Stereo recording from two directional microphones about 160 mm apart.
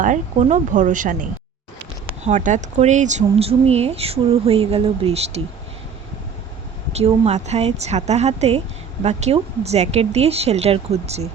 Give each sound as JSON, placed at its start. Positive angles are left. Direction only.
{"t": 0.0, "sound": "a woman's voice", "side_deg": -50}
{"t": 6.9, "sound": "a woman's voice", "side_deg": -40}